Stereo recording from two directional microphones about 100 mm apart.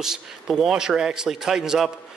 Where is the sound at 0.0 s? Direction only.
5° right (ahead or behind).